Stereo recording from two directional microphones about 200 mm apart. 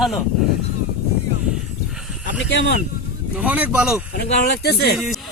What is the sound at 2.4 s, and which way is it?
Speech, 65° left (ahead or behind).